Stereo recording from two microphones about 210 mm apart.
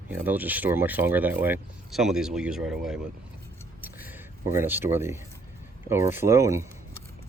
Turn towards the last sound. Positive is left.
turn(degrees=-15)  # may be behind; listen again after turning